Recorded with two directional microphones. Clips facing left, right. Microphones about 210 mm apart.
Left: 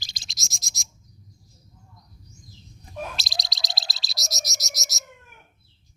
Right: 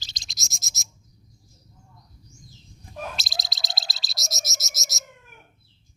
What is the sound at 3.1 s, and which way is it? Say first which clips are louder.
Bird: even; centre (ahead or behind).